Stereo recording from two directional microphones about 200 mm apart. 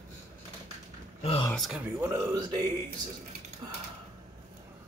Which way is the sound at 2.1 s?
15° right (ahead or behind).